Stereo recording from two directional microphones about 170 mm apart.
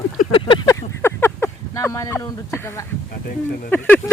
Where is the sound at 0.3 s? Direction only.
30° left (ahead or behind).